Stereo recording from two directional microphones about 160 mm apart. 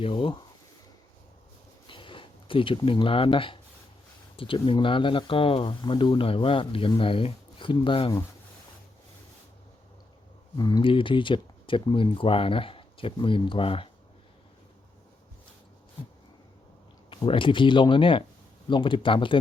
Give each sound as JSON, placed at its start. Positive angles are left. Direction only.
{"t": 0.0, "sound": "speech", "side_deg": 35}
{"t": 1.9, "sound": "a sound", "side_deg": 30}
{"t": 4.4, "sound": "speech", "side_deg": 35}
{"t": 10.6, "sound": "speech", "side_deg": 25}
{"t": 17.1, "sound": "speech", "side_deg": 30}